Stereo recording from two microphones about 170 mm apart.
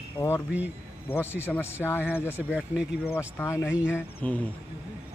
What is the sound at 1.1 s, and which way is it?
Speech, 15° left (ahead or behind).